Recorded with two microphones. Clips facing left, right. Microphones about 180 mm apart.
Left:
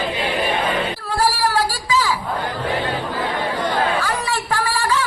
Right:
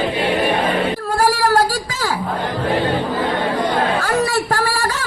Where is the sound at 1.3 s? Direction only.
45° right (ahead or behind).